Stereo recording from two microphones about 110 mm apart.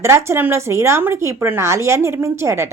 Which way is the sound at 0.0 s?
25° right (ahead or behind).